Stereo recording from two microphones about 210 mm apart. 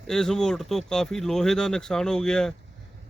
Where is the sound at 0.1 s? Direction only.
Centre (ahead or behind).